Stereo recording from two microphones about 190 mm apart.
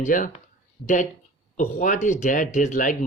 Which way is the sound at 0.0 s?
45° left (ahead or behind).